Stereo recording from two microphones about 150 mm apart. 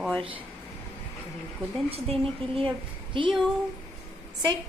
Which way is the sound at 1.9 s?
40° right (ahead or behind).